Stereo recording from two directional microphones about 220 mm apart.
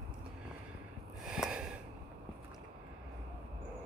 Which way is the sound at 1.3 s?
Centre (ahead or behind).